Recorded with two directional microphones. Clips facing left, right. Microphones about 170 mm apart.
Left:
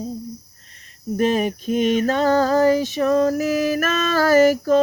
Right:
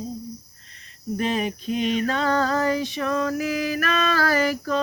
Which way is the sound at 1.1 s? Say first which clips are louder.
Left 5 dB; 45° left (ahead or behind).